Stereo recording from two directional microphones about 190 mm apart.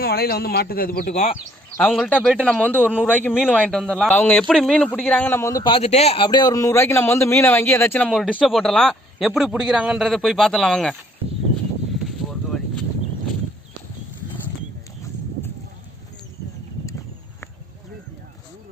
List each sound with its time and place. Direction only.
0.0 s a man's voice: 55° left (ahead or behind)
1.7 s a man's voice: 5° left (ahead or behind)